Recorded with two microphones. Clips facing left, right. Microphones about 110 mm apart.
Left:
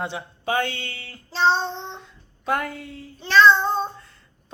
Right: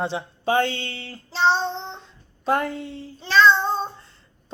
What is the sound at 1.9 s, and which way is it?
Child singing, 30° right (ahead or behind).